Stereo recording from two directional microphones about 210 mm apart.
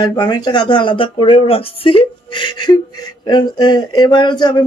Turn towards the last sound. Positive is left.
turn(degrees=20)  # may be behind; listen again after turning